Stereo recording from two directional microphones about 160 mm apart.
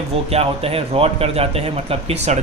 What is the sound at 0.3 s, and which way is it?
Speech, 40° right (ahead or behind).